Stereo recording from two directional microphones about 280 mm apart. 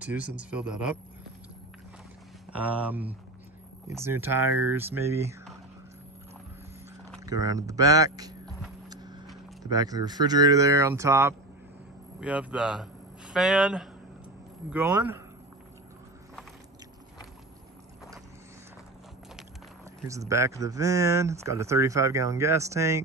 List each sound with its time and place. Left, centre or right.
0.0 s speech: centre
2.5 s speech: centre
7.2 s speech: centre
8.5 s music: centre
8.8 s vehicle: centre
9.6 s speech: centre
20.1 s speech: centre